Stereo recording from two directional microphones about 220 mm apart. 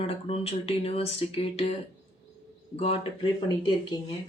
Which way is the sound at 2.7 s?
25° left (ahead or behind).